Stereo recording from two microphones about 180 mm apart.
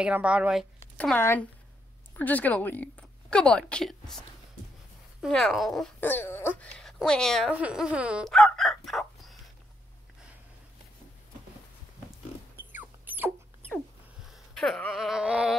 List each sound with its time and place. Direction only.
0.0 s speech: 5° right (ahead or behind)
0.9 s a woman's voice: 10° left (ahead or behind)
5.2 s speech: centre (ahead or behind)
12.5 s rodents: 10° right (ahead or behind)
14.3 s speech: centre (ahead or behind)